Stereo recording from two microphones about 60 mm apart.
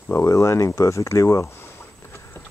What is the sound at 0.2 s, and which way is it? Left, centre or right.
Speech, left.